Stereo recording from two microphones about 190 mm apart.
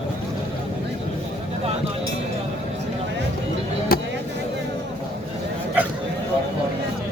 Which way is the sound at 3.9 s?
50° left (ahead or behind).